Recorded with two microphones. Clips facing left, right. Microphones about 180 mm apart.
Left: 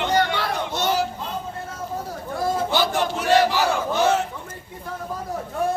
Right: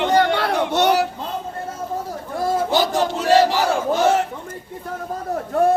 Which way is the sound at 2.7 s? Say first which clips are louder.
Right 4 dB; 40° right (ahead or behind).